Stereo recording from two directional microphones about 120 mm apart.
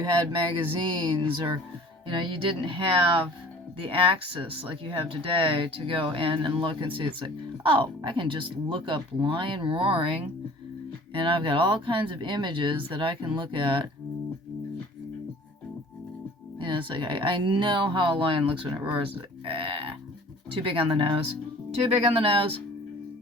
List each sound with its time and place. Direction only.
0.0 s a sound: 40° right (ahead or behind)
0.7 s speech: 45° right (ahead or behind)
16.6 s speech: 45° right (ahead or behind)